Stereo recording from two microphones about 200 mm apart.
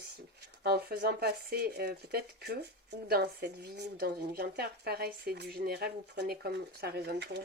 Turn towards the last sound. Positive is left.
turn(degrees=-60)  # may be behind; listen again after turning